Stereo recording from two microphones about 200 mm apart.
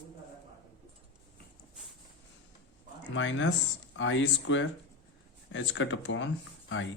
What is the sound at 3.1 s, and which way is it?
Speech, 65° left (ahead or behind).